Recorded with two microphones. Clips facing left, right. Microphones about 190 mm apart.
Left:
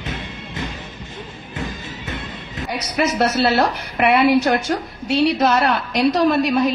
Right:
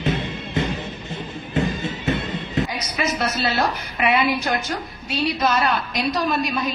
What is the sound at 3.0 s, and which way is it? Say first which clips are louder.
A woman's voice: left 6 dB; 65° left (ahead or behind).